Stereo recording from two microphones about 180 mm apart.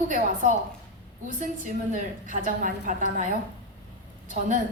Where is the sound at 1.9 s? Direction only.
45° right (ahead or behind).